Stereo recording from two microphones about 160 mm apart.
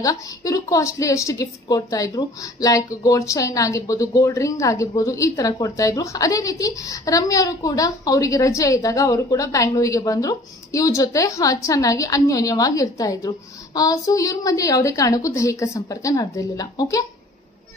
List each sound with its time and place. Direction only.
0.0 s a woman's voice: 20° left (ahead or behind)